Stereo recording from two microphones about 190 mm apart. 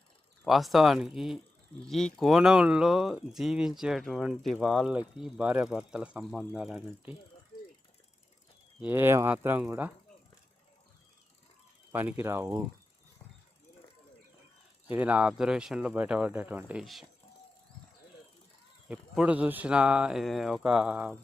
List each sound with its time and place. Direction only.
0.4 s speech: centre (ahead or behind)
8.8 s speech: 10° right (ahead or behind)
11.9 s speech: 10° right (ahead or behind)
14.8 s speech: 10° right (ahead or behind)
18.9 s speech: 5° right (ahead or behind)